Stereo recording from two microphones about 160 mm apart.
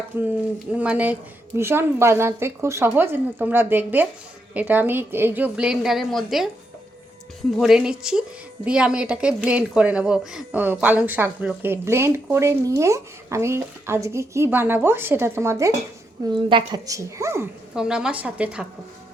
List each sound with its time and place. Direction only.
0.7 s a woman's voice: 10° right (ahead or behind)
7.6 s a woman's voice: 5° right (ahead or behind)
16.2 s a woman's voice: 30° right (ahead or behind)
17.7 s a woman's voice: 5° right (ahead or behind)